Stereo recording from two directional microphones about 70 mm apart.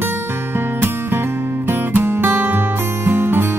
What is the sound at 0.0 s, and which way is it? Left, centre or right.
Music, right.